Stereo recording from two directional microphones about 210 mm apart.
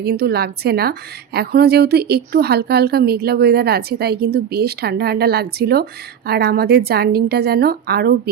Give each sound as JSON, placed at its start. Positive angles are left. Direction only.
{"t": 0.0, "sound": "a woman's voice", "side_deg": -50}